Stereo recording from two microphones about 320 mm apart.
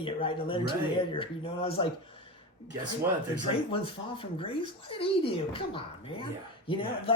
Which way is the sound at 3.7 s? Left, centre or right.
Centre.